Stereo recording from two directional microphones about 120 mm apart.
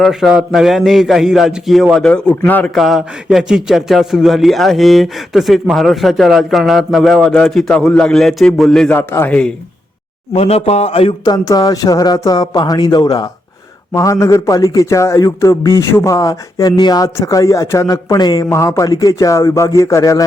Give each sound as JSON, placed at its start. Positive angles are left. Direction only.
{"t": 0.0, "sound": "a man's voice", "side_deg": -5}
{"t": 2.7, "sound": "a man's voice", "side_deg": 0}
{"t": 9.0, "sound": "speech", "side_deg": 20}
{"t": 10.3, "sound": "a man's voice", "side_deg": 55}
{"t": 11.3, "sound": "speech", "side_deg": 30}